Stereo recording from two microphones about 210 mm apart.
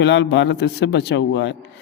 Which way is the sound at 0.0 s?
55° left (ahead or behind).